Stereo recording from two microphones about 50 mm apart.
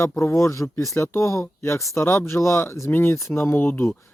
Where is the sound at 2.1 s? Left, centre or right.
Left.